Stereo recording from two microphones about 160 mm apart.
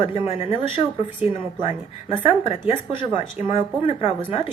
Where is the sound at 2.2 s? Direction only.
40° left (ahead or behind).